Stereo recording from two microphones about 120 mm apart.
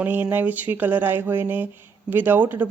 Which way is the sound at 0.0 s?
15° right (ahead or behind).